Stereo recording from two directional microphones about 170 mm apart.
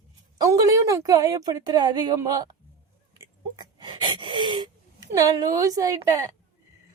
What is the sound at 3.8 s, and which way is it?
Gasp, 25° right (ahead or behind).